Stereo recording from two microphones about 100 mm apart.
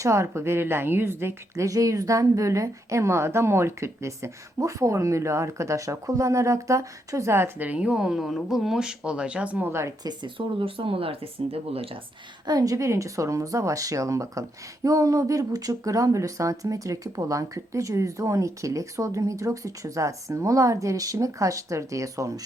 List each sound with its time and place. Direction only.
0.0 s a woman's voice: 30° right (ahead or behind); by 9.7 s 15° right (ahead or behind)
10.0 s speech: 50° right (ahead or behind); by 11.9 s 75° right (ahead or behind)
12.5 s speech: 35° right (ahead or behind)